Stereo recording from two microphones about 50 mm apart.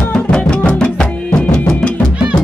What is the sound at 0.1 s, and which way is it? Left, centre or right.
Music, centre.